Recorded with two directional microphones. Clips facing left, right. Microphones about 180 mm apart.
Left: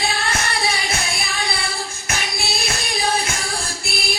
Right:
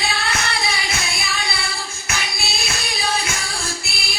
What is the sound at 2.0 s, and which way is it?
Music, 50° left (ahead or behind).